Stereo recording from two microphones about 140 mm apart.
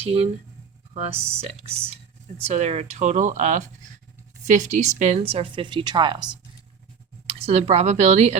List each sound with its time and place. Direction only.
0.0 s speech: 45° right (ahead or behind)
1.1 s speech: 15° right (ahead or behind)
1.4 s a woman's voice: 45° right (ahead or behind)
7.3 s speech: 45° right (ahead or behind)